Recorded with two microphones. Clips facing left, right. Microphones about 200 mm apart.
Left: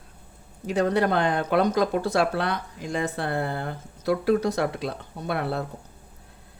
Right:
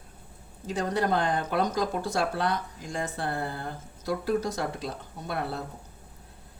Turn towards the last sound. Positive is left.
turn(degrees=65)  # may be behind; listen again after turning